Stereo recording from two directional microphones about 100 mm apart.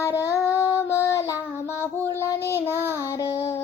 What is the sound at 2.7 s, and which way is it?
Child singing, 25° right (ahead or behind).